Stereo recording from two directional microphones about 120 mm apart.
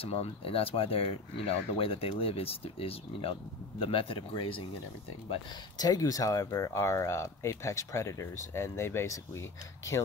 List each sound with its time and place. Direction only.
0.0 s speech: 55° left (ahead or behind)
5.8 s speech: 30° left (ahead or behind)